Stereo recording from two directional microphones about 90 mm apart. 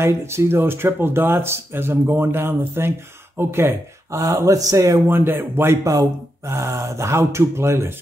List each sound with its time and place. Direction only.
0.0 s speech: 30° right (ahead or behind)
5.0 s speech: 25° right (ahead or behind)
5.9 s speech: 35° right (ahead or behind)